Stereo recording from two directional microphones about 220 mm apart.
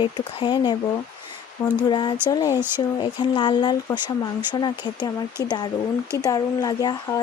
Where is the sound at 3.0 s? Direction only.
20° left (ahead or behind).